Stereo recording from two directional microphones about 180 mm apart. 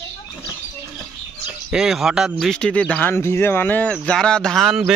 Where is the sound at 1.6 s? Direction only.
Centre (ahead or behind).